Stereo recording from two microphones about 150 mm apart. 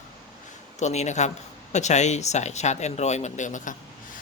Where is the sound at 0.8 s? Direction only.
50° left (ahead or behind).